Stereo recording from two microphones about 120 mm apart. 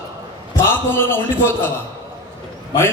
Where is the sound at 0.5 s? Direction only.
20° left (ahead or behind).